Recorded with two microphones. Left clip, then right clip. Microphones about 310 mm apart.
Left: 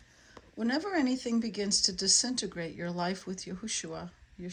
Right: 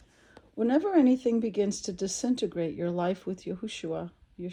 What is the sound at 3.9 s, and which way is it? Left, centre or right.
Speech, right.